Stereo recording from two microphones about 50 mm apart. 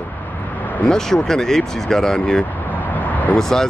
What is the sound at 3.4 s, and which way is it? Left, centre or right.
Speech, centre.